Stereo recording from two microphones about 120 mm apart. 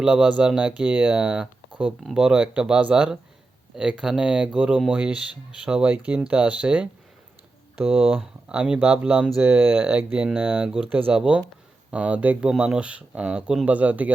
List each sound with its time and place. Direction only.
0.0 s speech: 5° right (ahead or behind)